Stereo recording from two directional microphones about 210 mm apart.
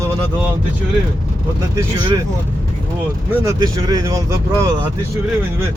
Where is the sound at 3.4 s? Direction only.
20° right (ahead or behind).